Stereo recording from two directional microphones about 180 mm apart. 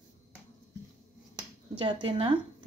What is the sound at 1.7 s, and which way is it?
Speech, 30° right (ahead or behind).